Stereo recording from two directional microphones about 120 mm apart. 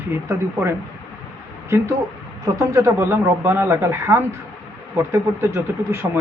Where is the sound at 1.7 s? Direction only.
20° right (ahead or behind).